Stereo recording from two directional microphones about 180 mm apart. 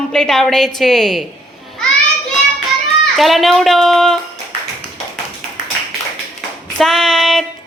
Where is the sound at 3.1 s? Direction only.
Centre (ahead or behind).